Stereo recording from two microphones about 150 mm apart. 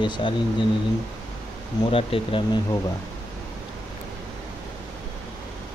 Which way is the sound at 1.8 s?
35° left (ahead or behind).